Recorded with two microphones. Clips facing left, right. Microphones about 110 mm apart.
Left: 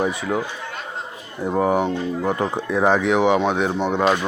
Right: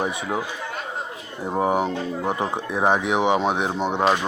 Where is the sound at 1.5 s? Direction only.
15° right (ahead or behind).